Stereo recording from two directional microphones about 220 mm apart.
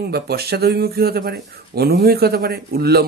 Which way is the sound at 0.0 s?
45° right (ahead or behind).